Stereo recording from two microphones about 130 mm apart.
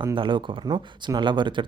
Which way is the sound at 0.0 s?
35° right (ahead or behind).